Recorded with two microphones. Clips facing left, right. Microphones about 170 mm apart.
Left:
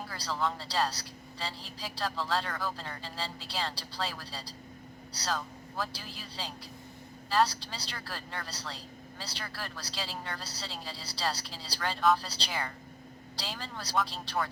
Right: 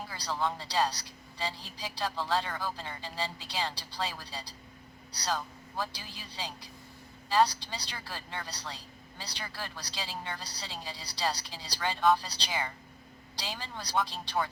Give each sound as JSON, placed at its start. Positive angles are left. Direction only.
{"t": 0.1, "sound": "speech", "side_deg": -15}
{"t": 5.8, "sound": "speech", "side_deg": -15}